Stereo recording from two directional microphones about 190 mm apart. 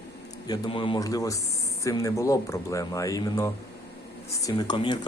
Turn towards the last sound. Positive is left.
turn(degrees=25)  # may be behind; listen again after turning